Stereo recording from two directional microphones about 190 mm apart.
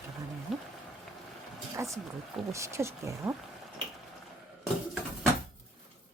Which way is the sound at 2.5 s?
15° right (ahead or behind).